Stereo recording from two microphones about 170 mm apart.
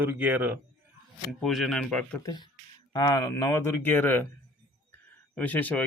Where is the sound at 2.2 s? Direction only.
25° left (ahead or behind).